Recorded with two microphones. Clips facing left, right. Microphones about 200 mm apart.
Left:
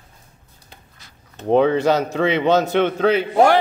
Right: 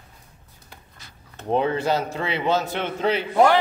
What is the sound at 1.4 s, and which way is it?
A man's voice, 75° left (ahead or behind).